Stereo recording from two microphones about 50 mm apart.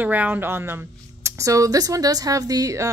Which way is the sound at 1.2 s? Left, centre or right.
Right.